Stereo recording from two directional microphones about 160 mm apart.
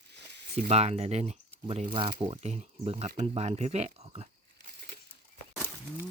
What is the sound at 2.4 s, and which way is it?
Speech, 45° right (ahead or behind).